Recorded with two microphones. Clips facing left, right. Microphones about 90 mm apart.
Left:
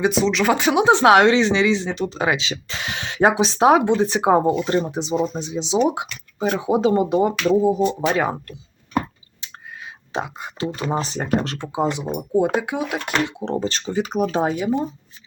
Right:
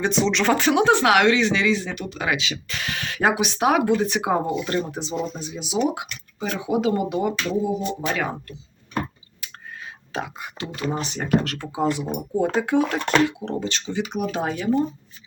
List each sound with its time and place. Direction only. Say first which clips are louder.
0.0 s speech: left 2 dB; 5° left (ahead or behind)
0.5 s speech: left 1 dB; 15° left (ahead or behind); by 8.4 s 35° left (ahead or behind)
10.1 s speech: left 3 dB; 25° left (ahead or behind)
13.2 s speech: left 1 dB; 35° left (ahead or behind)
14.5 s speech: even; 15° left (ahead or behind)